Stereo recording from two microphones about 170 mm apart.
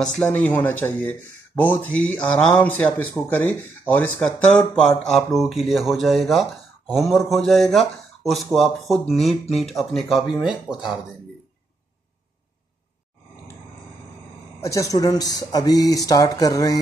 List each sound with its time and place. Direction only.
0.0 s speech: 5° left (ahead or behind)
14.6 s speech: 20° left (ahead or behind)